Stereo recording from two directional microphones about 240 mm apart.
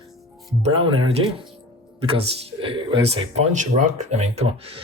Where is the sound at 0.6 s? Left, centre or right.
Right.